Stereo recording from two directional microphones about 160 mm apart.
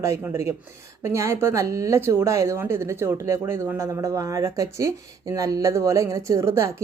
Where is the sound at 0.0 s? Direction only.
20° right (ahead or behind).